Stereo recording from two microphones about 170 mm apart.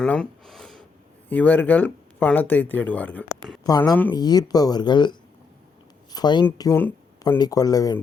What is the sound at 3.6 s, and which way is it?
Speech, 25° left (ahead or behind).